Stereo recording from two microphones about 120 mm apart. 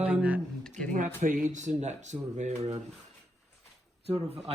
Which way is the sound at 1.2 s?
90° right.